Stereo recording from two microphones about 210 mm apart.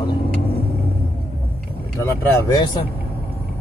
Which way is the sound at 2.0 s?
20° left (ahead or behind).